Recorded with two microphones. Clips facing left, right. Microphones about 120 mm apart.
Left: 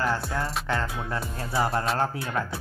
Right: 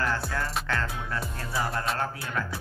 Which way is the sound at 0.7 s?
25° left (ahead or behind).